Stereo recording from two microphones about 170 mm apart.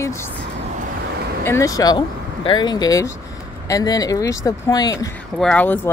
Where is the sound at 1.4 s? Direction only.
15° left (ahead or behind).